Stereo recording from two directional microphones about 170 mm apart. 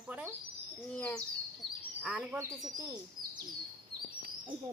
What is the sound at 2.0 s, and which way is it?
Speech, 10° right (ahead or behind).